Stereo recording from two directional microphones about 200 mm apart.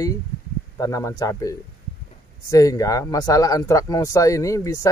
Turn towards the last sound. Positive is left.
turn(degrees=15)  # may be behind; listen again after turning